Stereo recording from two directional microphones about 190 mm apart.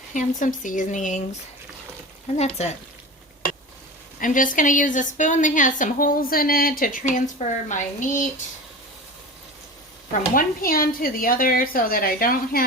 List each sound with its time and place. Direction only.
0.1 s speech: 40° left (ahead or behind)
2.3 s speech: 35° left (ahead or behind)
4.2 s a woman's voice: 45° left (ahead or behind)
10.1 s a woman's voice: 50° left (ahead or behind)